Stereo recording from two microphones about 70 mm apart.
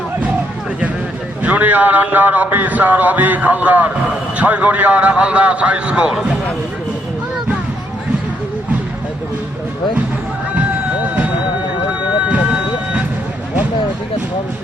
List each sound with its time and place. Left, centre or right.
1.4 s a man's voice: right
12.3 s vehicle: centre